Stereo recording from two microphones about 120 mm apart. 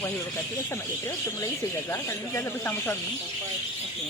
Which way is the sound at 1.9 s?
20° left (ahead or behind).